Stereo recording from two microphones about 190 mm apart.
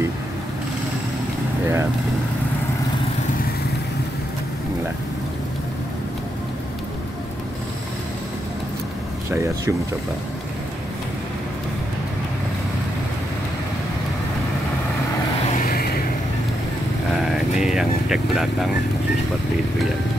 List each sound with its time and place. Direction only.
9.3 s speech: 15° right (ahead or behind)
15.5 s vehicle: 50° left (ahead or behind)
17.2 s vehicle: centre (ahead or behind)